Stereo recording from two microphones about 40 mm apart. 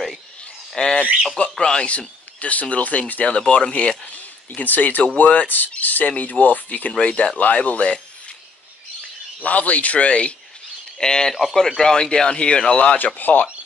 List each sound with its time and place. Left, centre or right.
0.8 s speech: left
1.9 s speech: left
3.3 s speech: left
4.1 s speech: left
6.9 s speech: left
9.4 s speech: left
11.0 s speech: centre
12.9 s speech: left